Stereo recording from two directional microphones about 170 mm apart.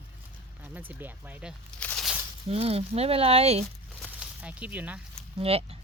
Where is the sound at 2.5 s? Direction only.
35° right (ahead or behind).